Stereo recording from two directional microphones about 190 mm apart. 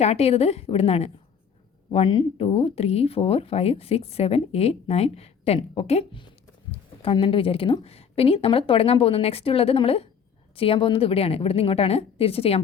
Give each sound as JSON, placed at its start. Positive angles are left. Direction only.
{"t": 0.0, "sound": "speech", "side_deg": 35}